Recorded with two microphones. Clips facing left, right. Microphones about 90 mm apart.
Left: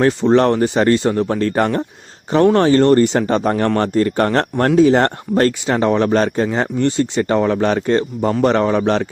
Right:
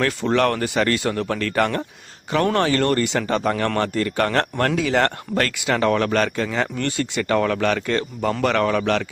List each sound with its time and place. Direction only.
0.0 s speech: 25° left (ahead or behind)